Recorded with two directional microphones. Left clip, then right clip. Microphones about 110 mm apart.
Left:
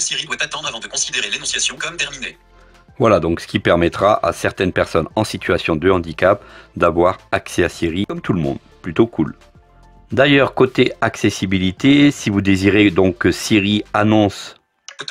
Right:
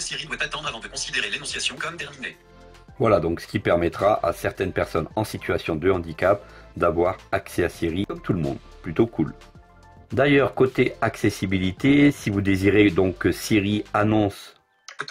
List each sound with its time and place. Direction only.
0.0 s speech: 35° left (ahead or behind)
3.0 s speech: 55° left (ahead or behind)
14.0 s speech: 60° left (ahead or behind)